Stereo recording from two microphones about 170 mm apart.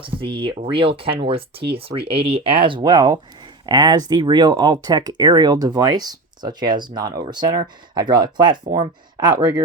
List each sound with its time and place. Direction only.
0.0 s speech: 30° right (ahead or behind)